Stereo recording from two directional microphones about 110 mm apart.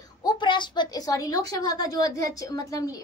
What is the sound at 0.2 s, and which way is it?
A woman's voice, 45° left (ahead or behind).